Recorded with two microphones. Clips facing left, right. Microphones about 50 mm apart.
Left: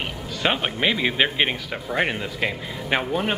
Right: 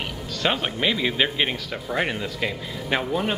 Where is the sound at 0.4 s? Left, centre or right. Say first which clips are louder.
Left 1 dB; centre.